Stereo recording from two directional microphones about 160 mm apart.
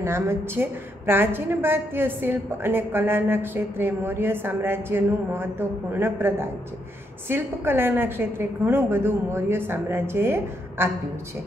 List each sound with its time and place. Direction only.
0.0 s a woman's voice: 15° right (ahead or behind)